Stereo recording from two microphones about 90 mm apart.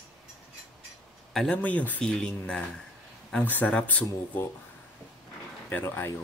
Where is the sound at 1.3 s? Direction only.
Centre (ahead or behind).